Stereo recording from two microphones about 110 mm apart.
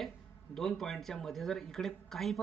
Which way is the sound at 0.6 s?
5° left (ahead or behind).